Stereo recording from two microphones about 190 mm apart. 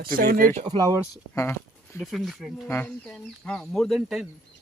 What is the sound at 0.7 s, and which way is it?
Speech, 20° right (ahead or behind).